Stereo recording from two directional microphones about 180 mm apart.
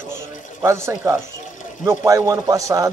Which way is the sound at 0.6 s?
15° right (ahead or behind).